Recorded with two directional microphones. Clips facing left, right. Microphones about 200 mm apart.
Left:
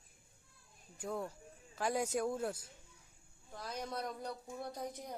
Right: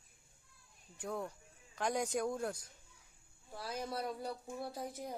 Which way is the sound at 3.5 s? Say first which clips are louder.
Right 1 dB; 10° right (ahead or behind).